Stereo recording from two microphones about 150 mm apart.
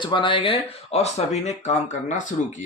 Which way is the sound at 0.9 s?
45° left (ahead or behind).